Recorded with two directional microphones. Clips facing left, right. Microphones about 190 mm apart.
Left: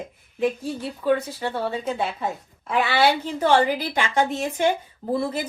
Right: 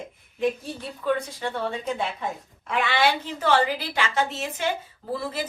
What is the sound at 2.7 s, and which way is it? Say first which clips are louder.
Speech: left 3 dB; 35° left (ahead or behind).